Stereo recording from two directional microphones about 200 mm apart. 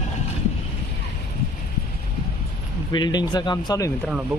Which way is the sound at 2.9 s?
20° left (ahead or behind).